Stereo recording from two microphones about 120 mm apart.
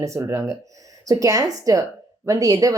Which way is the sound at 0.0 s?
25° right (ahead or behind).